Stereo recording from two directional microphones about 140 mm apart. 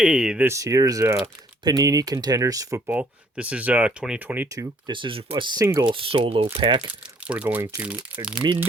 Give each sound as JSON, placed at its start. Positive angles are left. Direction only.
{"t": 0.0, "sound": "speech", "side_deg": -5}
{"t": 4.4, "sound": "speech", "side_deg": -25}
{"t": 4.9, "sound": "speech", "side_deg": -35}
{"t": 7.0, "sound": "speech", "side_deg": -10}
{"t": 8.4, "sound": "speech", "side_deg": -40}